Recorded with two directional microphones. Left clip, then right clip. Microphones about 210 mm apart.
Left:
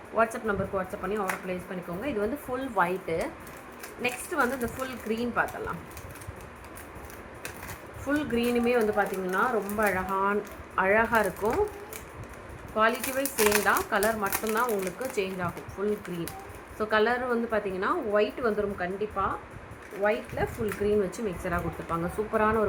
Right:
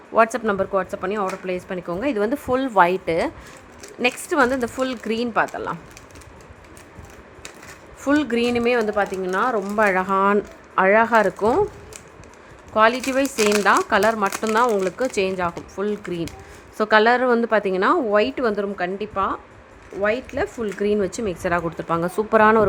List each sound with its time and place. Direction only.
0.2 s speech: 60° right (ahead or behind)
8.0 s speech: 60° right (ahead or behind)
12.7 s speech: 60° right (ahead or behind)